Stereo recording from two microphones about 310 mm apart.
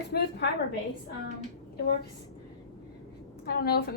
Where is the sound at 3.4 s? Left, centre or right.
Left.